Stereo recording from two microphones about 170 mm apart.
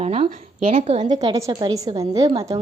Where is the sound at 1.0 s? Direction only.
25° right (ahead or behind).